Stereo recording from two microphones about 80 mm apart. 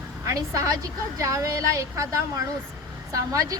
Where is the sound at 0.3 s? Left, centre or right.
Right.